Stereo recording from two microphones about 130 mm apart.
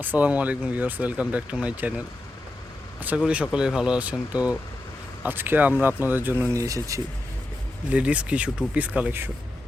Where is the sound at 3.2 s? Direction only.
10° right (ahead or behind).